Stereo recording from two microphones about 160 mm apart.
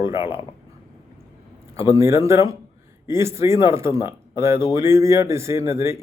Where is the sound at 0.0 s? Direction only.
15° right (ahead or behind).